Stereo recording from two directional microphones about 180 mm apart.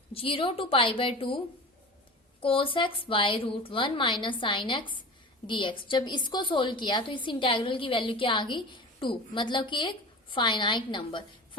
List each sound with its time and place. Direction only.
0.1 s a woman's voice: 30° left (ahead or behind)
2.4 s a woman's voice: 30° left (ahead or behind)